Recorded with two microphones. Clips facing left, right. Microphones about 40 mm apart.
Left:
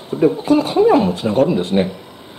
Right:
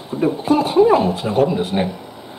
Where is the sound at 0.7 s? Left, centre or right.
Left.